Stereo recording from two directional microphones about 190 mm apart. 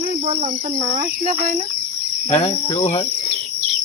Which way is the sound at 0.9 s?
40° right (ahead or behind).